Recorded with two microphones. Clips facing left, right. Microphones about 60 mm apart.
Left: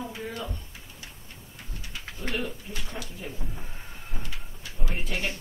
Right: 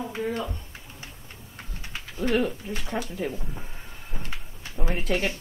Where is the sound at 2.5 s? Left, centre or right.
Right.